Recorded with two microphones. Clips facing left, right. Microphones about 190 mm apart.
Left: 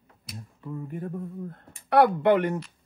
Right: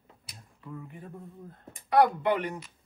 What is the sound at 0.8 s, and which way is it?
Speech, 55° left (ahead or behind).